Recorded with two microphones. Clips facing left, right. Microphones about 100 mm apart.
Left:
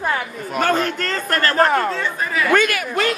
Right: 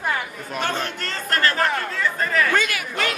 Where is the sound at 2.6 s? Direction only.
55° left (ahead or behind).